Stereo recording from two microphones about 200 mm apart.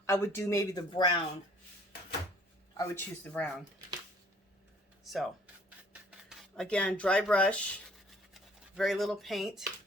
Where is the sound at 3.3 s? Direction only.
10° left (ahead or behind).